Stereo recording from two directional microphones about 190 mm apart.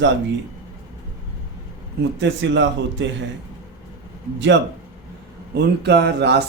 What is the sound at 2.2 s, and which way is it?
Speech, 70° right (ahead or behind).